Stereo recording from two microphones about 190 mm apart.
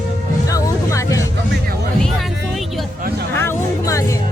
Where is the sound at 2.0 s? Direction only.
Centre (ahead or behind).